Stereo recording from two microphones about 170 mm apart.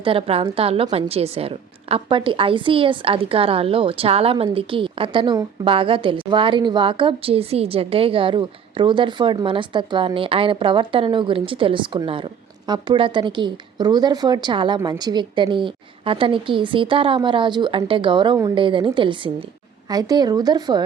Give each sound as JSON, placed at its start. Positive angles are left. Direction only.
{"t": 0.0, "sound": "a woman's voice", "side_deg": -30}